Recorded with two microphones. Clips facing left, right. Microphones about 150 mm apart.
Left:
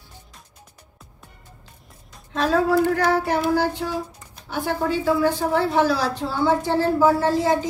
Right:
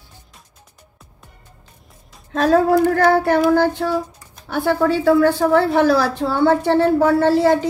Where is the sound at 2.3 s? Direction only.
45° right (ahead or behind).